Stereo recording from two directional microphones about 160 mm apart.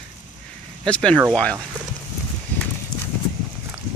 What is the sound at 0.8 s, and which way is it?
Speech, 5° left (ahead or behind).